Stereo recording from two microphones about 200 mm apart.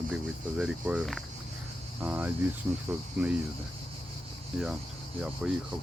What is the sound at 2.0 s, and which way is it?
Speech, 10° right (ahead or behind).